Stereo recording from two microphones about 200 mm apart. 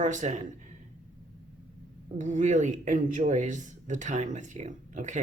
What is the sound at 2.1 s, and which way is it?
Speech, 40° right (ahead or behind).